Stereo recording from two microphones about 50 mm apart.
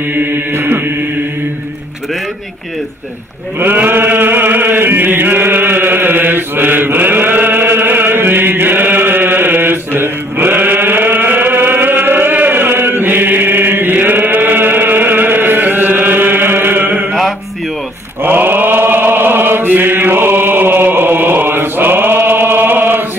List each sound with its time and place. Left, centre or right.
0.1 s chant: right
3.5 s sheep: right
3.8 s chant: right
18.2 s chant: right